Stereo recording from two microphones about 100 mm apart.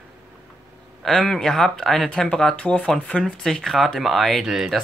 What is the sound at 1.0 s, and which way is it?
Speech, centre (ahead or behind).